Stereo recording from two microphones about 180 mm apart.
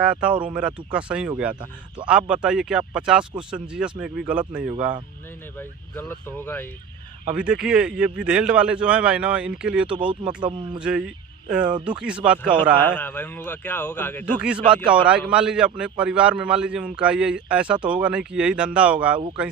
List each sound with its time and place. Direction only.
0.0 s a man's voice: 5° right (ahead or behind)
5.5 s a man's voice: 10° left (ahead or behind)
7.3 s a man's voice: 5° right (ahead or behind)
10.1 s speech: 25° right (ahead or behind)
10.8 s speech: 5° right (ahead or behind)
12.8 s a man's voice: 10° left (ahead or behind)
14.3 s a man's voice: 5° right (ahead or behind)